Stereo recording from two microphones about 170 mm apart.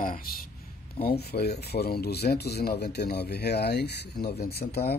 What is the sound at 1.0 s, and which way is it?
Speech, 65° left (ahead or behind).